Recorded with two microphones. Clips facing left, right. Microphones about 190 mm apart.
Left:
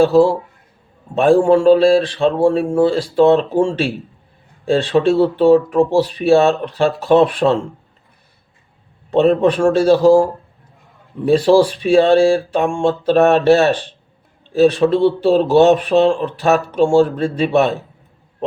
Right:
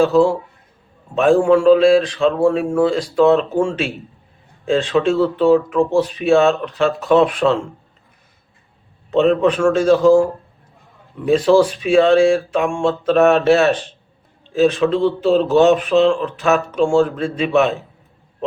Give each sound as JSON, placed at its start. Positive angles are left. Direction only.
{"t": 0.0, "sound": "speech", "side_deg": 35}
{"t": 9.0, "sound": "speech", "side_deg": 35}
{"t": 11.3, "sound": "speech", "side_deg": 35}